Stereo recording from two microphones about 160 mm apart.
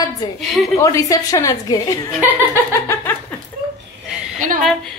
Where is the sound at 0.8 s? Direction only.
20° left (ahead or behind).